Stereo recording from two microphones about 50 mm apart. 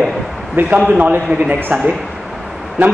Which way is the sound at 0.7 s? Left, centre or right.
Right.